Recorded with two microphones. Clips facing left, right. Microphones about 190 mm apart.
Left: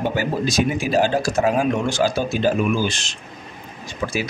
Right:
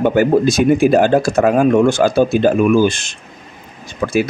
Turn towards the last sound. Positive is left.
turn(degrees=-60)  # may be behind; listen again after turning